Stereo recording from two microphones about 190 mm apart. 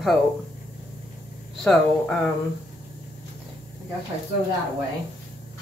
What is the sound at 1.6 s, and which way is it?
Speech, centre (ahead or behind).